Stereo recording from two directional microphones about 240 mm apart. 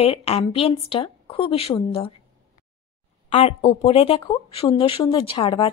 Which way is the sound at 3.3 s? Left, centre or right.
Left.